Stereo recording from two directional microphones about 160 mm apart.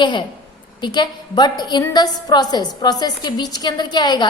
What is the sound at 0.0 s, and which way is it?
A woman's voice, 30° left (ahead or behind).